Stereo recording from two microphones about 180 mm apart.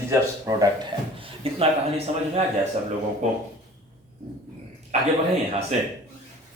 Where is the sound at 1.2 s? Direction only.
35° right (ahead or behind).